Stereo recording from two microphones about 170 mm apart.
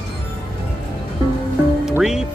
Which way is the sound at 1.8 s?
5° right (ahead or behind).